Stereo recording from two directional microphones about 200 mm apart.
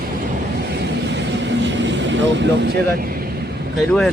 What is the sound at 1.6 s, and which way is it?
Vehicle, 65° right (ahead or behind).